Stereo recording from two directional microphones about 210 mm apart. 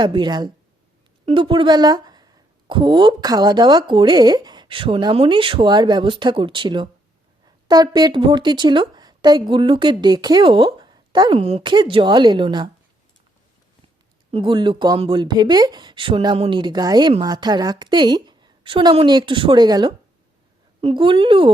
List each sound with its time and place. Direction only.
0.0 s speech: 20° right (ahead or behind)
14.3 s speech: 25° right (ahead or behind)